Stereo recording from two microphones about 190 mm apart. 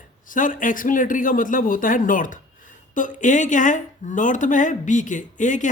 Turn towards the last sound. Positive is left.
turn(degrees=40)  # may be behind; listen again after turning